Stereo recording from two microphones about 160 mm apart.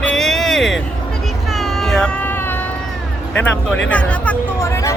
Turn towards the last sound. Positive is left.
turn(degrees=15)  # may be behind; listen again after turning